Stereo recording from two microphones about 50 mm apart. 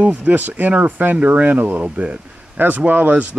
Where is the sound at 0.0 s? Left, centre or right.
Right.